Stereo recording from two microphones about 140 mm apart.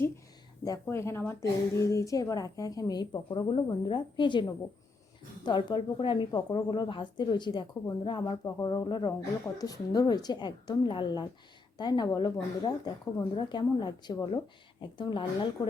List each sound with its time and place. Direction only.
0.6 s a woman's voice: 20° left (ahead or behind)